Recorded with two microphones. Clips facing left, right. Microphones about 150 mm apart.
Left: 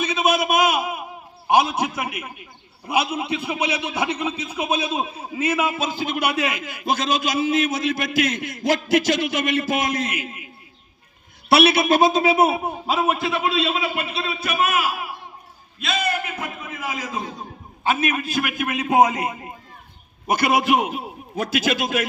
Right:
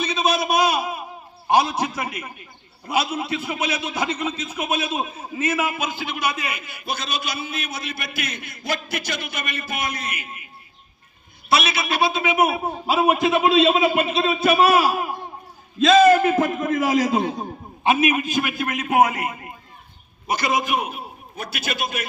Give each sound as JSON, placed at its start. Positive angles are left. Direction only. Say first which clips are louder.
{"t": 0.0, "sound": "a sound", "louder": "left 1 dB", "side_deg": 10}
{"t": 1.8, "sound": "a man's voice", "louder": "left 1 dB", "side_deg": 10}
{"t": 6.0, "sound": "a man's voice", "louder": "left 4 dB", "side_deg": 50}
{"t": 11.4, "sound": "a man's voice", "louder": "left 6 dB", "side_deg": 65}
{"t": 12.9, "sound": "a man's voice", "louder": "right 4 dB", "side_deg": -10}
{"t": 15.8, "sound": "a man's voice", "louder": "right 12 dB", "side_deg": -90}
{"t": 18.3, "sound": "a man's voice", "louder": "even", "side_deg": 5}
{"t": 18.8, "sound": "a man's voice", "louder": "left 1 dB", "side_deg": 20}
{"t": 20.2, "sound": "a man's voice", "louder": "left 4 dB", "side_deg": 55}